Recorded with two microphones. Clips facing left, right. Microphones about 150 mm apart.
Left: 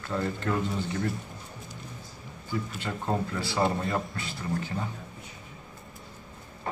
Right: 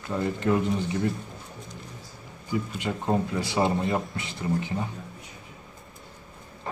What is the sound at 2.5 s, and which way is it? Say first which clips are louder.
Speech: right 4 dB; 15° right (ahead or behind).